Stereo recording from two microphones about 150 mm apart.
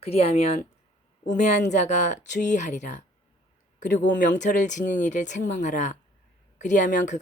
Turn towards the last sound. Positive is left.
turn(degrees=55)  # may be behind; listen again after turning